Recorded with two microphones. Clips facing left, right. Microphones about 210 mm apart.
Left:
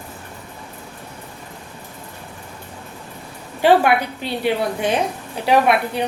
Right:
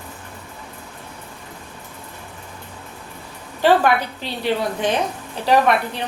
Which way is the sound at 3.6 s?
10° left (ahead or behind).